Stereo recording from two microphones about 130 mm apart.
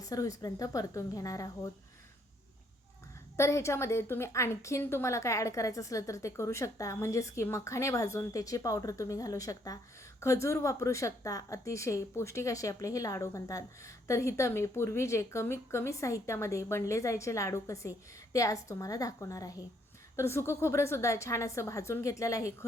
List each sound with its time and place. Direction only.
0.0 s a woman's voice: 25° left (ahead or behind)
3.3 s a woman's voice: 20° left (ahead or behind)